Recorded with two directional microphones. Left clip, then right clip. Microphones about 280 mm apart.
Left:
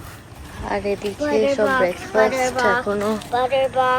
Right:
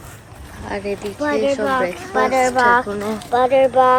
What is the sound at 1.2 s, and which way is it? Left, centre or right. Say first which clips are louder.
Speech: even; right.